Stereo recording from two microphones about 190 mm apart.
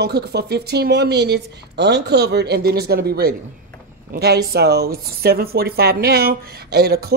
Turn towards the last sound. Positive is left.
turn(degrees=-55)  # may be behind; listen again after turning